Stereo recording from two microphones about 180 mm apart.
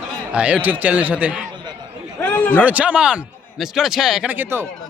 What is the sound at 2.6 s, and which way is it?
A man's voice, 10° right (ahead or behind).